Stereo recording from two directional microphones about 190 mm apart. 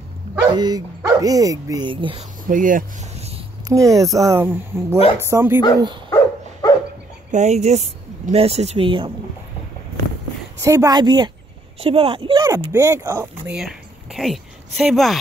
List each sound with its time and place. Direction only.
0.5 s speech: 20° right (ahead or behind)
2.4 s speech: 45° right (ahead or behind)
3.6 s speech: 15° right (ahead or behind)
6.0 s dog: 15° left (ahead or behind)
7.2 s speech: 35° right (ahead or behind)
10.6 s speech: 15° right (ahead or behind)
12.7 s speech: 15° right (ahead or behind)
13.6 s a woman's voice: centre (ahead or behind)